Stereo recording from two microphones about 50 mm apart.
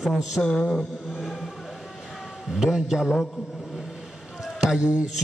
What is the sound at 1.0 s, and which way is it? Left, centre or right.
Speech, centre.